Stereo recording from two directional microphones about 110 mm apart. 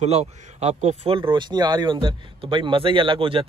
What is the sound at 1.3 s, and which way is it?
A man's voice, 45° right (ahead or behind).